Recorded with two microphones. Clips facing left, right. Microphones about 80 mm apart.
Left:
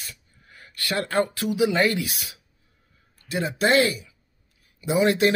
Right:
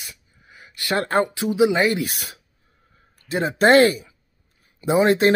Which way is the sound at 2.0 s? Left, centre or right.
Right.